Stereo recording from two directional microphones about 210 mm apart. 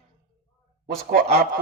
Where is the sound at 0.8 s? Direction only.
45° right (ahead or behind).